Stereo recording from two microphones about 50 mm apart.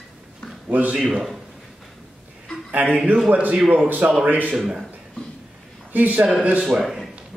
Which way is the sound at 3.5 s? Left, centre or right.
Centre.